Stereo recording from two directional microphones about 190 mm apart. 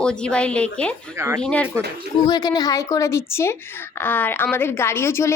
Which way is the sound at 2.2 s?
20° left (ahead or behind).